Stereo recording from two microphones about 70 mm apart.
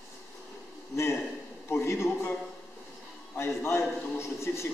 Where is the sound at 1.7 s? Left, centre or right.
Left.